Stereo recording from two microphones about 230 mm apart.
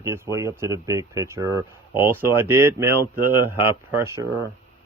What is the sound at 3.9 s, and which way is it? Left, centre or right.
Speech, centre.